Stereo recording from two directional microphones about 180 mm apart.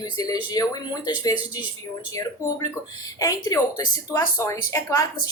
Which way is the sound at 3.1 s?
20° left (ahead or behind).